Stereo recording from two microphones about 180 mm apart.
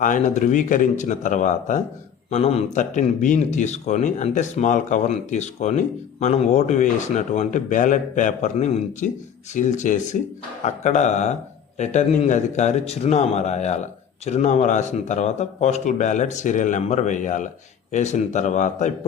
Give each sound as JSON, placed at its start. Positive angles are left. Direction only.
{"t": 0.0, "sound": "speech", "side_deg": 45}